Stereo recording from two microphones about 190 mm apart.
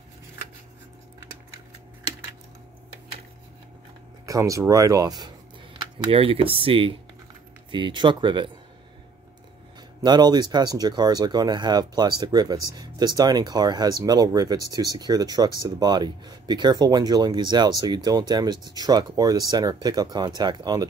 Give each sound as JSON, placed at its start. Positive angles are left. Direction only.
{"t": 4.3, "sound": "speech", "side_deg": -15}
{"t": 10.0, "sound": "speech", "side_deg": -20}